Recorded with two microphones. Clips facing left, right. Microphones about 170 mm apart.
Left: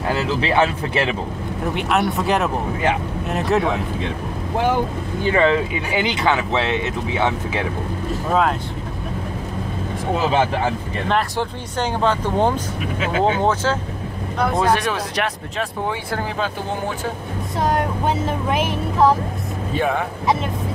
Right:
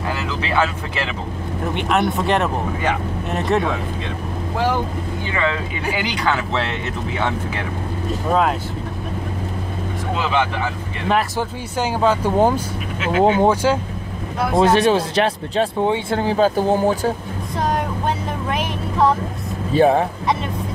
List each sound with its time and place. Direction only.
0.1 s speech: 25° left (ahead or behind)
1.7 s speech: centre (ahead or behind)
5.3 s speech: 30° left (ahead or behind)
8.3 s speech: centre (ahead or behind)
10.2 s speech: 35° left (ahead or behind)
11.1 s speech: 5° right (ahead or behind)
14.6 s speech: 25° right (ahead or behind)
16.3 s speech: 35° right (ahead or behind)
17.6 s speech: centre (ahead or behind)
19.7 s speech: 35° right (ahead or behind)